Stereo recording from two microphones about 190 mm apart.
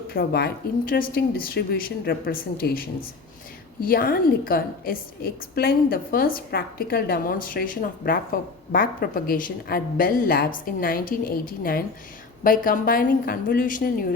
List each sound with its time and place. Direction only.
0.1 s a woman's voice: 55° left (ahead or behind)